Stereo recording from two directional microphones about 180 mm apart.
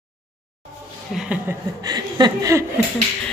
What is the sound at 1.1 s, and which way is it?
Speech, 5° right (ahead or behind).